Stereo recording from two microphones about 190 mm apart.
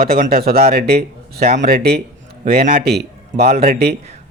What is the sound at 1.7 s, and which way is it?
Speech, 55° right (ahead or behind).